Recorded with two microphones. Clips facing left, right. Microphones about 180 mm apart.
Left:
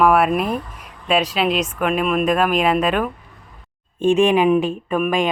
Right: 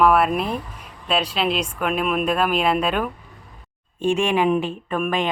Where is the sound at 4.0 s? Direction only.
20° left (ahead or behind).